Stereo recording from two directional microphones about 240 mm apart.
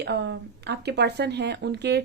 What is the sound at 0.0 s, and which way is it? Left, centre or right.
Speech, right.